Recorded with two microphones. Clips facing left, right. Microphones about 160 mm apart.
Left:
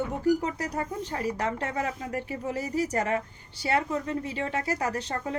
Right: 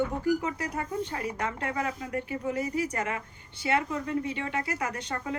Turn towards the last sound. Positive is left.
turn(degrees=35)  # may be behind; listen again after turning